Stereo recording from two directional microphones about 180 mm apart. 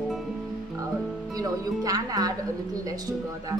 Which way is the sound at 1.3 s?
20° right (ahead or behind).